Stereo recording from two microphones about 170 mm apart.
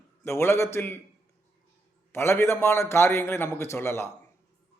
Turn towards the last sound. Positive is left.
turn(degrees=15)  # may be behind; listen again after turning